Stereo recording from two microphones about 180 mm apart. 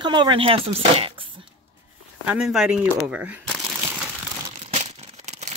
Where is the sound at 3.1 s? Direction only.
5° right (ahead or behind).